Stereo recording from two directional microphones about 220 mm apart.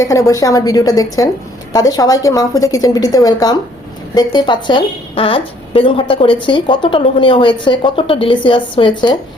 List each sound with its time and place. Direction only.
0.0 s a woman's voice: 15° left (ahead or behind)